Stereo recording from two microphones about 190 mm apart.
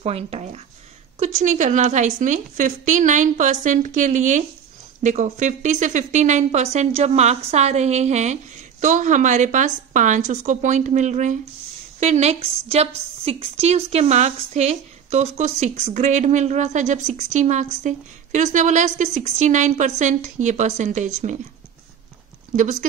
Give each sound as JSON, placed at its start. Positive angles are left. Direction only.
{"t": 0.0, "sound": "a woman's voice", "side_deg": -35}
{"t": 22.6, "sound": "a woman's voice", "side_deg": -40}